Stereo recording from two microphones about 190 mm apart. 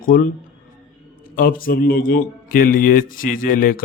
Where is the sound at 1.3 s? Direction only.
50° left (ahead or behind).